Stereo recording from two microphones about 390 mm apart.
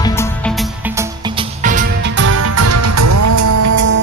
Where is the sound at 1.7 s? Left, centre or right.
Right.